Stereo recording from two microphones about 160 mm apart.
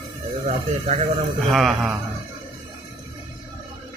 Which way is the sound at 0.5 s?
40° right (ahead or behind).